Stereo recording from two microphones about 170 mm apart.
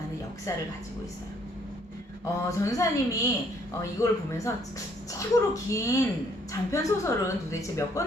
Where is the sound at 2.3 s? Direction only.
20° left (ahead or behind).